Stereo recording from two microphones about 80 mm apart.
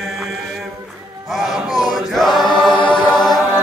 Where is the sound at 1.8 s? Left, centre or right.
Centre.